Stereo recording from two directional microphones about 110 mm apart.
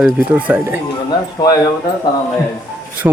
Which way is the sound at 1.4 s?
35° left (ahead or behind).